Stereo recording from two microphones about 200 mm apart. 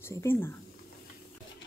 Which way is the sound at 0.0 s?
15° left (ahead or behind).